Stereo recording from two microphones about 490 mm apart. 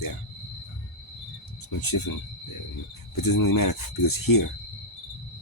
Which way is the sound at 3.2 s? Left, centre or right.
Left.